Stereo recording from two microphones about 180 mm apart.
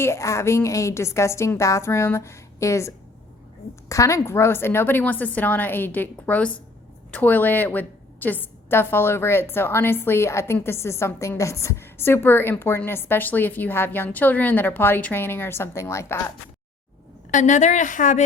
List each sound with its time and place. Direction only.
0.0 s a woman's voice: 15° left (ahead or behind)
17.3 s a woman's voice: 45° left (ahead or behind)